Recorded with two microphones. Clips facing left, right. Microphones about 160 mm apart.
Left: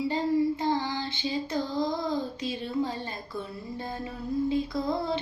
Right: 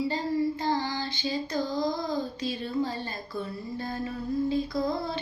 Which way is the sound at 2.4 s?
20° left (ahead or behind).